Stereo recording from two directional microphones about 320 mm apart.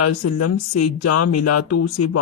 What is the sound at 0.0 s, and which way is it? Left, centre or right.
Speech, left.